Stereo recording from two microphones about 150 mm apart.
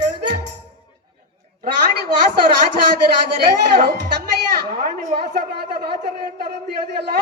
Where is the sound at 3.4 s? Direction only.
90° right.